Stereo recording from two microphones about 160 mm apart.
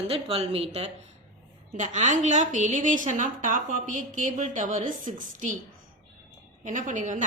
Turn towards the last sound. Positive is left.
turn(degrees=-50)  # may be behind; listen again after turning